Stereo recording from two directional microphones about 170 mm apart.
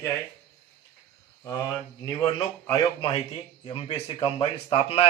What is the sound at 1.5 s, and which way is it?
A man's voice, 20° left (ahead or behind).